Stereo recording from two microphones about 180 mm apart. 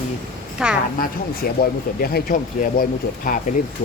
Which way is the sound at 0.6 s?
5° right (ahead or behind).